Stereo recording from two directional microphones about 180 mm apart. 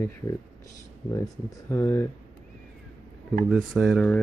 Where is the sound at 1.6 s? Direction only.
15° left (ahead or behind).